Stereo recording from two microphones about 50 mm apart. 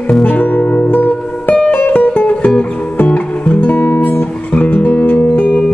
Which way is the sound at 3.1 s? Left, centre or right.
Left.